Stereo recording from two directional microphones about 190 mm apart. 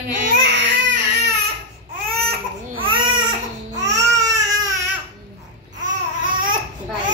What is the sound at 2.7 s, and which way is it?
Baby cry, 25° right (ahead or behind).